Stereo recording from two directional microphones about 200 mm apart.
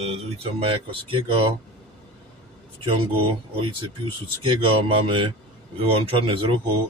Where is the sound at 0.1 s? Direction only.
30° right (ahead or behind).